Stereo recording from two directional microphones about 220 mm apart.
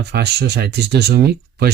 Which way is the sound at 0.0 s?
50° right (ahead or behind).